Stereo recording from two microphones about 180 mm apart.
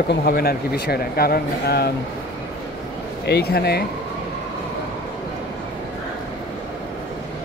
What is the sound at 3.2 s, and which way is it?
Speech, 65° left (ahead or behind).